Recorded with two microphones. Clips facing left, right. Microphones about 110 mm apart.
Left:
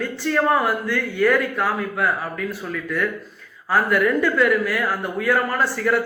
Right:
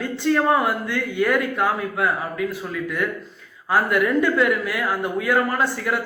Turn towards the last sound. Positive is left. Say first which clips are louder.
# left 1 dB
turn(degrees=-20)  # may be behind; listen again after turning